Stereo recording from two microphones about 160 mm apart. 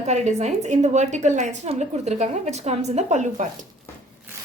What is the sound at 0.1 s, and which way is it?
A woman's voice, 45° right (ahead or behind).